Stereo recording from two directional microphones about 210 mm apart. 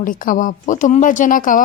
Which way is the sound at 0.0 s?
40° left (ahead or behind).